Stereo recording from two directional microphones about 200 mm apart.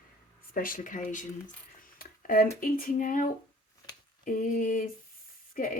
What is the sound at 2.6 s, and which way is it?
Speech, 45° left (ahead or behind).